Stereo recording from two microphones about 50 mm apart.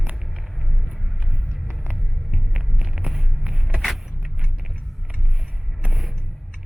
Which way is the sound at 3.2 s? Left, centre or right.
Centre.